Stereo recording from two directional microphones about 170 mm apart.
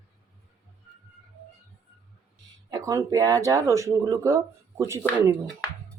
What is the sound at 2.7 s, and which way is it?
Speech, 20° right (ahead or behind).